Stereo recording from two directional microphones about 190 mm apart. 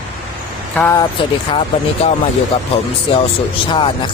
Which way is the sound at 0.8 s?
15° left (ahead or behind).